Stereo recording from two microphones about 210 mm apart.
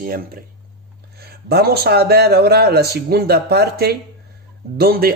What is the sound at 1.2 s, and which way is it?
Speech, 50° right (ahead or behind).